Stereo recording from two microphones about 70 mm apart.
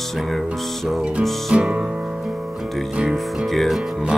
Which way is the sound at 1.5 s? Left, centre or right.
Centre.